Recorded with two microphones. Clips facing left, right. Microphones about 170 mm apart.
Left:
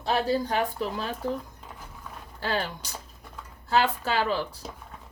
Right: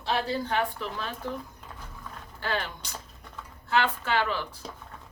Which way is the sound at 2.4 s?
35° left (ahead or behind).